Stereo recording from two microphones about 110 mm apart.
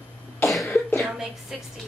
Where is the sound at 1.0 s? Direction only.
5° right (ahead or behind).